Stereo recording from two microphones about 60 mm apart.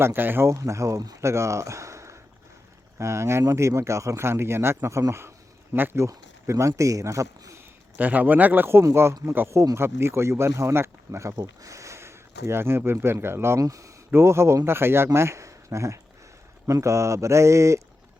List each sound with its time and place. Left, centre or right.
0.0 s speech: right
0.4 s speech: right
5.7 s speech: right
6.1 s speech: right
7.9 s speech: right
9.7 s speech: right
13.6 s speech: right
14.1 s speech: right